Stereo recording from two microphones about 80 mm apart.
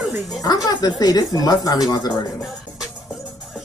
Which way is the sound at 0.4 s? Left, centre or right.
Left.